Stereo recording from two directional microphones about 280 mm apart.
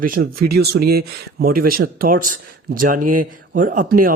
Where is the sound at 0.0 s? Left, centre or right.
Right.